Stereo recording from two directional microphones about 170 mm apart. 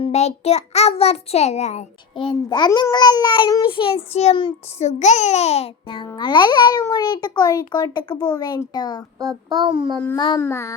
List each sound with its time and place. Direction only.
0.0 s a child's voice: 40° left (ahead or behind)
2.1 s a child's voice: 25° left (ahead or behind)
9.6 s a child's voice: 25° right (ahead or behind)
10.2 s a child's voice: 25° left (ahead or behind)
10.4 s child singing: 15° left (ahead or behind)